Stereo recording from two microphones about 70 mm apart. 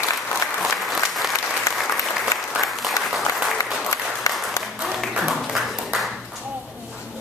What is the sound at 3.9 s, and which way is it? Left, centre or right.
Applause, left.